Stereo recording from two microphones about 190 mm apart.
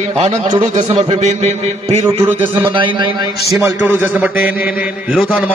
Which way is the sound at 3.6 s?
10° right (ahead or behind).